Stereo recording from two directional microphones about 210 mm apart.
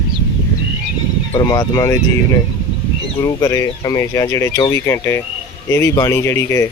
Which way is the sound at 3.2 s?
15° left (ahead or behind).